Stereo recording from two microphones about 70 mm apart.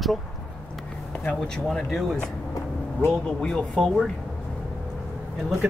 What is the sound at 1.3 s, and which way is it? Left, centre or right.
Speech, centre.